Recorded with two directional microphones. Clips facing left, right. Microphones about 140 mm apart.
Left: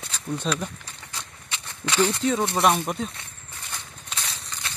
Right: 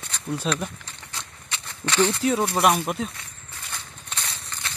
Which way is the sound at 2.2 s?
10° right (ahead or behind).